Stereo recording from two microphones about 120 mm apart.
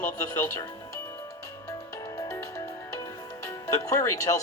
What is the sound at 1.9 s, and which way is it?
Music, 30° left (ahead or behind).